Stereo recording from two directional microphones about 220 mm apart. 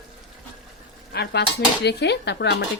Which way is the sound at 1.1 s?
50° left (ahead or behind).